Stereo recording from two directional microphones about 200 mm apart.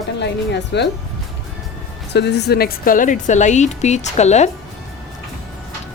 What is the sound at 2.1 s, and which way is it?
A woman's voice, 55° left (ahead or behind).